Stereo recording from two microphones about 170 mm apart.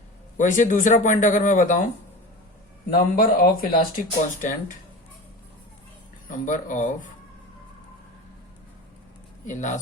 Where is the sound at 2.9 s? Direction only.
60° left (ahead or behind).